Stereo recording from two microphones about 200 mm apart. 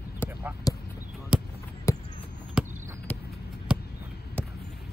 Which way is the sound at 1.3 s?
5° right (ahead or behind).